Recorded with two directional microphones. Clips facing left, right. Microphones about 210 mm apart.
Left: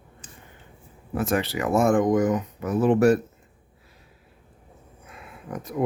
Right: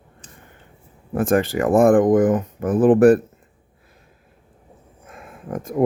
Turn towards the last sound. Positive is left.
turn(degrees=-50)  # may be behind; listen again after turning